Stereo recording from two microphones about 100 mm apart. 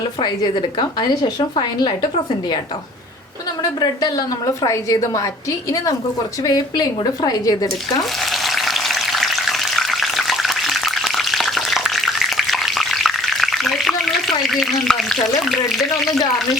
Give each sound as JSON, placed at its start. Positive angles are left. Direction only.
{"t": 0.2, "sound": "a woman's voice", "side_deg": 45}
{"t": 3.6, "sound": "a woman's voice", "side_deg": 40}
{"t": 8.2, "sound": "frying", "side_deg": 0}